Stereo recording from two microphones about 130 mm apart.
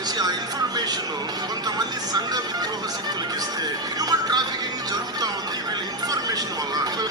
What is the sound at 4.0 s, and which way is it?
Music, 30° right (ahead or behind).